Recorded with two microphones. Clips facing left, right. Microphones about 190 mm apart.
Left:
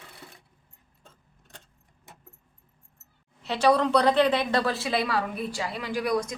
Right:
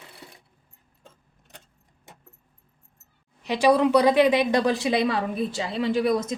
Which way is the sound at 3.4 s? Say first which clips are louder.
Right 3 dB; 10° right (ahead or behind).